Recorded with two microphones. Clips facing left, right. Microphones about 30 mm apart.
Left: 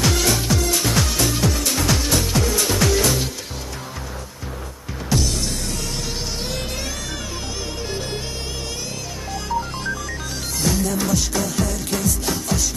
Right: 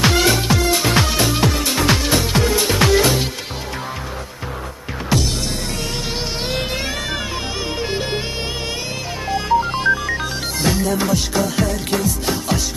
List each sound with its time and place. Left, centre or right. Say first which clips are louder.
0.0 s music: right 4 dB; right
5.1 s music: right 2 dB; right
9.3 s music: right 8 dB; right